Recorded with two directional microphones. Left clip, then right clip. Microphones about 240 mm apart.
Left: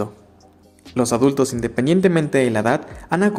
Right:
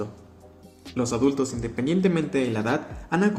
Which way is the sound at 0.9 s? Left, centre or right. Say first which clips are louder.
Left 7 dB; left.